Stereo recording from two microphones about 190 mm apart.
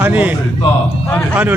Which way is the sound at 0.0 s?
10° right (ahead or behind).